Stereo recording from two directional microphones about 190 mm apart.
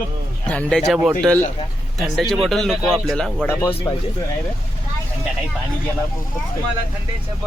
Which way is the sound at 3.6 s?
15° left (ahead or behind).